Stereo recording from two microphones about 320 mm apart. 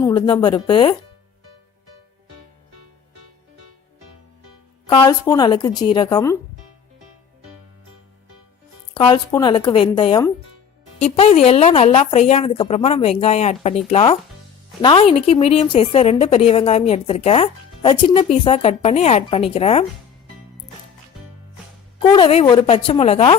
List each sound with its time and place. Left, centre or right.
0.0 s a woman's voice: centre
4.9 s a woman's voice: centre
9.0 s a woman's voice: centre
22.1 s a woman's voice: centre